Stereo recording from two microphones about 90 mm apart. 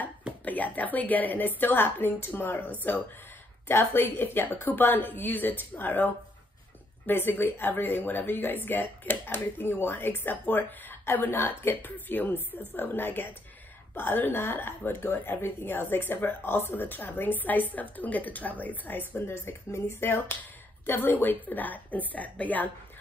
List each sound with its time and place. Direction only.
0.5 s speech: 20° left (ahead or behind)